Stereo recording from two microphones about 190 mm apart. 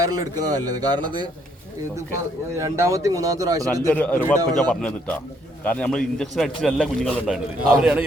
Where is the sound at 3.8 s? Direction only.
10° left (ahead or behind).